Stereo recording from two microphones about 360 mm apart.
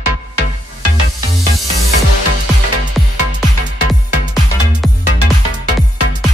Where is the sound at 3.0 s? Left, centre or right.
Centre.